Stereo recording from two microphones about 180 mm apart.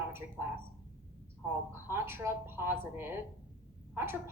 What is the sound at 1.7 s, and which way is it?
A woman's voice, 10° right (ahead or behind).